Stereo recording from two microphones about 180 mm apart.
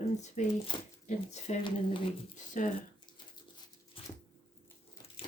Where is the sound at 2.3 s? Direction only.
45° left (ahead or behind).